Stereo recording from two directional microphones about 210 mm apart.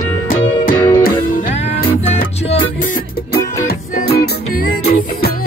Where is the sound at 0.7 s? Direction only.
20° left (ahead or behind).